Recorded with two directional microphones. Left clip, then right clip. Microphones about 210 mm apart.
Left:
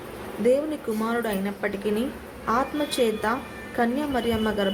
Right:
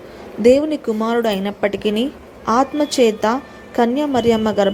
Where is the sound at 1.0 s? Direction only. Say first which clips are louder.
Right 9 dB; 30° right (ahead or behind).